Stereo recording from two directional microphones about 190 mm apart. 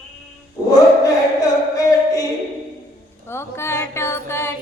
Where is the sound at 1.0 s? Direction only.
15° left (ahead or behind).